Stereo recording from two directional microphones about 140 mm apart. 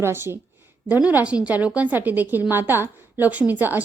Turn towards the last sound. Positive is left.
turn(degrees=-15)  # may be behind; listen again after turning